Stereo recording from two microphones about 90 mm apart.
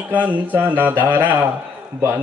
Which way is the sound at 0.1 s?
20° right (ahead or behind).